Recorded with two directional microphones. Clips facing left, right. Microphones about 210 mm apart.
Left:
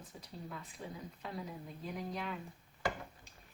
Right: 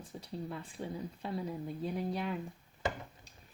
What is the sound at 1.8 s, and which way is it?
Speech, 30° right (ahead or behind).